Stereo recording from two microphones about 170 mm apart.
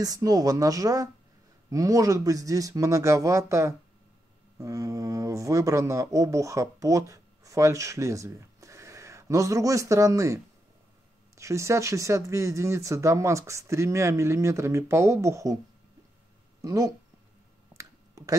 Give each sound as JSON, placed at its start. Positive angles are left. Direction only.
{"t": 0.0, "sound": "speech", "side_deg": -20}
{"t": 16.6, "sound": "speech", "side_deg": -20}
{"t": 17.7, "sound": "a sound", "side_deg": -20}